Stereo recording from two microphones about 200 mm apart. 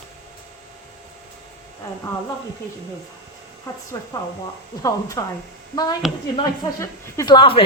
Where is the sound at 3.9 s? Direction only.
15° left (ahead or behind).